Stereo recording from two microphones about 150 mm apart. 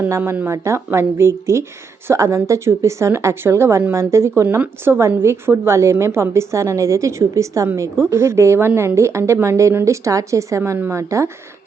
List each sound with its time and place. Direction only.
0.0 s a woman's voice: 15° right (ahead or behind)